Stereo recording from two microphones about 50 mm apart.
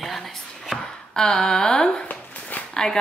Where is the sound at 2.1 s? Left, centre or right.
Left.